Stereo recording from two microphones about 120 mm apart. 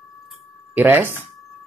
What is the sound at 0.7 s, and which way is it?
Speech, 15° right (ahead or behind).